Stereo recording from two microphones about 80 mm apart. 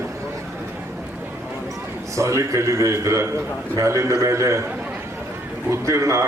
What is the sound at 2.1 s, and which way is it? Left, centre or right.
A man's voice, right.